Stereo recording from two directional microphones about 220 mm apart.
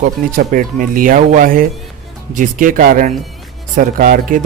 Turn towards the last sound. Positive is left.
turn(degrees=-40)  # may be behind; listen again after turning